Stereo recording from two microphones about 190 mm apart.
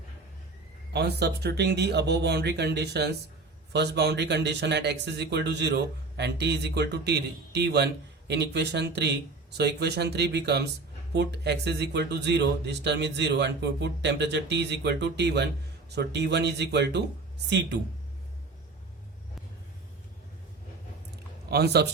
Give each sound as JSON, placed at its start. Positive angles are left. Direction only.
{"t": 0.9, "sound": "speech", "side_deg": -60}
{"t": 21.5, "sound": "speech", "side_deg": -60}